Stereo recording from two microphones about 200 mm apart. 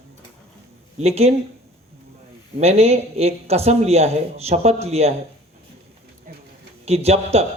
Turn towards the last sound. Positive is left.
turn(degrees=-30)  # may be behind; listen again after turning